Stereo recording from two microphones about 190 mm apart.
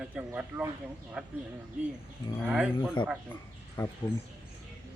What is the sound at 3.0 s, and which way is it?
Speech, 25° left (ahead or behind).